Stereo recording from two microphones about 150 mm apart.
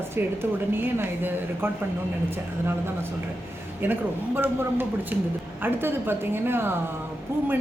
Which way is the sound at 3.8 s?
15° right (ahead or behind).